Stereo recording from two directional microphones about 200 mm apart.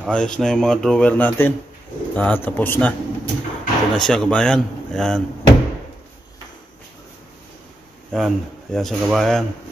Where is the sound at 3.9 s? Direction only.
5° left (ahead or behind).